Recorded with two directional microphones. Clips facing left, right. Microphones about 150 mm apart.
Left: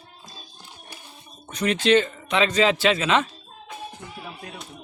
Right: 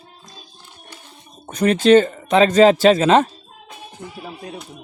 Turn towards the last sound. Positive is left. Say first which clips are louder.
# right 8 dB
turn(degrees=-45)  # may be behind; listen again after turning